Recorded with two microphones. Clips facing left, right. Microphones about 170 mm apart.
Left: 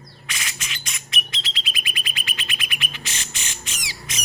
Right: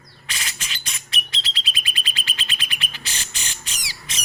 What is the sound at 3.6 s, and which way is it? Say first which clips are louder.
Squawk: left 2 dB; 35° right (ahead or behind).